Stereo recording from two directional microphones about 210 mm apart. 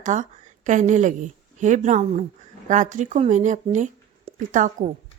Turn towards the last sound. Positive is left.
turn(degrees=-35)  # may be behind; listen again after turning